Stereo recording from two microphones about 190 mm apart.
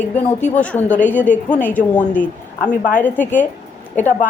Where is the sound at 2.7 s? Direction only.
45° left (ahead or behind).